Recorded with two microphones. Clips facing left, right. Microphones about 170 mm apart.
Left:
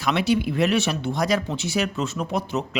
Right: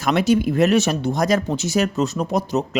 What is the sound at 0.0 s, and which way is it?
Speech, 45° right (ahead or behind).